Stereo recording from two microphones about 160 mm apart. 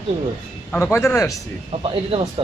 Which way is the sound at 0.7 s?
15° left (ahead or behind).